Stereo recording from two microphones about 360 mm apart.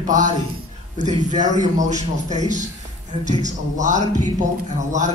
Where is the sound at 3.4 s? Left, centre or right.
Centre.